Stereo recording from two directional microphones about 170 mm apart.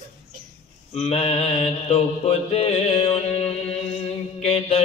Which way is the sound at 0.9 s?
35° left (ahead or behind).